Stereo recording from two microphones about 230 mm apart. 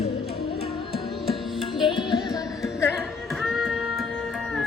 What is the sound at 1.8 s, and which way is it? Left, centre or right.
Music, centre.